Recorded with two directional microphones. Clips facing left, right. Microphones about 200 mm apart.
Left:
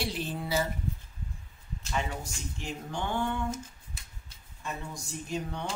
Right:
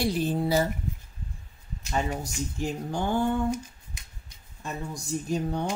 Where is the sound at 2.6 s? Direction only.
40° right (ahead or behind).